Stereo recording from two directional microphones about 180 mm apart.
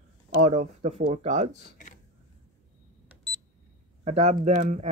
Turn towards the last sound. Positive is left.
turn(degrees=-40)  # may be behind; listen again after turning